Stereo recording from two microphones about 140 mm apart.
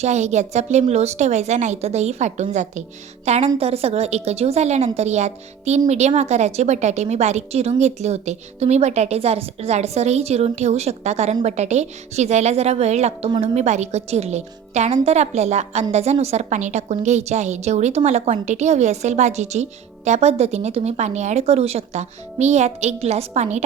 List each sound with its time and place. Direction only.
0.0 s a woman's voice: 55° right (ahead or behind)